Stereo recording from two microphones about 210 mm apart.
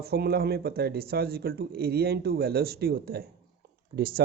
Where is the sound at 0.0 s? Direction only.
50° right (ahead or behind).